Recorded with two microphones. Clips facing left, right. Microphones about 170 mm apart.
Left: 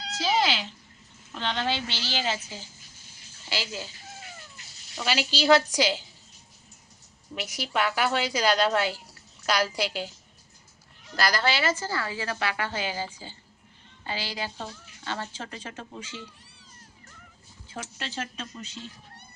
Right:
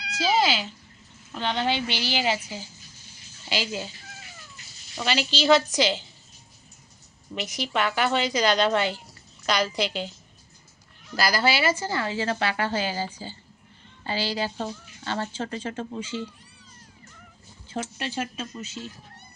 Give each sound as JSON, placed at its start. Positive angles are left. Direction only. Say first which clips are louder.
{"t": 0.2, "sound": "a woman's voice", "louder": "right 3 dB", "side_deg": 0}
{"t": 5.0, "sound": "a woman's voice", "louder": "right 1 dB", "side_deg": 10}
{"t": 7.3, "sound": "a woman's voice", "louder": "right 2 dB", "side_deg": 10}
{"t": 11.2, "sound": "a woman's voice", "louder": "right 2 dB", "side_deg": -5}
{"t": 17.9, "sound": "a woman's voice", "louder": "right 5 dB", "side_deg": -15}